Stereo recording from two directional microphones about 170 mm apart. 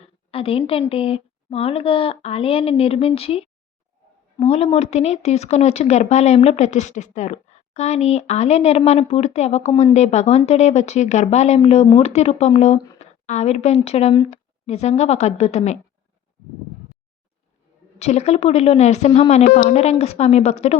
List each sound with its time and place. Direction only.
0.3 s a sound: 35° left (ahead or behind)
0.7 s speech: 35° left (ahead or behind)
18.0 s speech: 40° left (ahead or behind)